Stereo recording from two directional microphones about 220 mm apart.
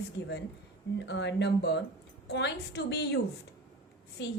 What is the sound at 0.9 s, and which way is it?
A woman's voice, 50° left (ahead or behind).